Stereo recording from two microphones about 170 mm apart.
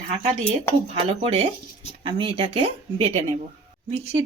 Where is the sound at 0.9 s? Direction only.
35° right (ahead or behind).